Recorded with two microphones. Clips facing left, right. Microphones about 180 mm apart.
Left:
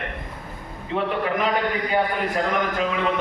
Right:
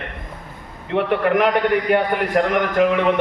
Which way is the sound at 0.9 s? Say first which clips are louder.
Right 6 dB; 65° right (ahead or behind).